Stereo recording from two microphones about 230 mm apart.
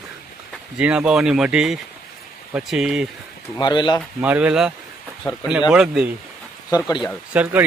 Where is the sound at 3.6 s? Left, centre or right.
Centre.